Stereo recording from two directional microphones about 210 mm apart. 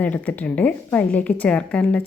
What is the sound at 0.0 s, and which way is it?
A woman's voice, 5° left (ahead or behind).